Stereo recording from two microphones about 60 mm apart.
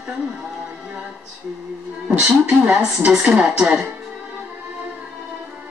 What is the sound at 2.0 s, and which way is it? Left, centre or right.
A woman's voice, centre.